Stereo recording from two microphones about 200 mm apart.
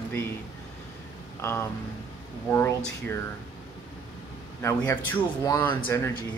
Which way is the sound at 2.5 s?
15° left (ahead or behind).